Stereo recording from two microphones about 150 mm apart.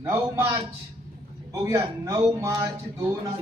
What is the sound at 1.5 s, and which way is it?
Speech, 20° right (ahead or behind).